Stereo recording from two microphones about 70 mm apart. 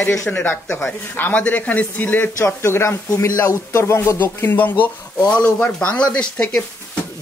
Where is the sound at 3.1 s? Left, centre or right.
Left.